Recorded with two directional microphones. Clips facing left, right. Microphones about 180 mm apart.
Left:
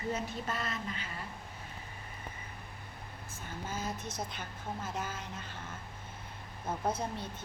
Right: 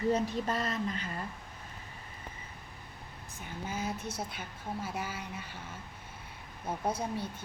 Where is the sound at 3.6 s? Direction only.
10° right (ahead or behind).